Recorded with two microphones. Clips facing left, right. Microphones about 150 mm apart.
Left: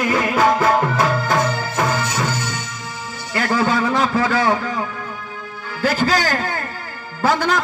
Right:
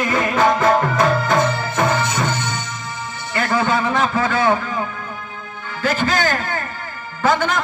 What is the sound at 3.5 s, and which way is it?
Speech, 55° right (ahead or behind).